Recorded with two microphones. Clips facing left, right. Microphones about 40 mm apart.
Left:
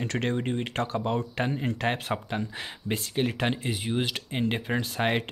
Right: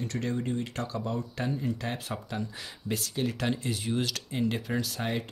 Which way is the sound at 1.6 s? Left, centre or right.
Left.